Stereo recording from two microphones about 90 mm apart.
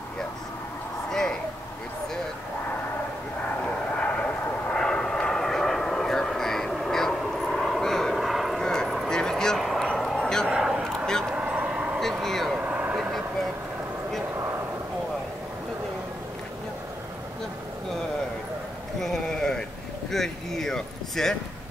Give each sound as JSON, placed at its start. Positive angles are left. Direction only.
{"t": 3.9, "sound": "vehicle", "side_deg": 15}
{"t": 10.5, "sound": "vehicle", "side_deg": -5}
{"t": 11.2, "sound": "vehicle", "side_deg": -10}
{"t": 12.0, "sound": "vehicle", "side_deg": 5}
{"t": 12.5, "sound": "vehicle", "side_deg": -15}
{"t": 18.9, "sound": "a sound", "side_deg": 5}